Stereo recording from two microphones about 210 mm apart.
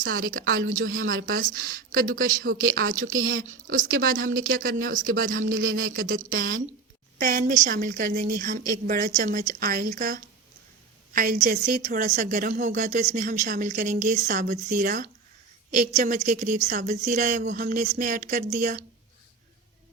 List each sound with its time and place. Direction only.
0.0 s a woman's voice: 40° right (ahead or behind)